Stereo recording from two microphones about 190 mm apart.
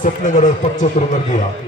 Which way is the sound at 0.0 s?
40° left (ahead or behind).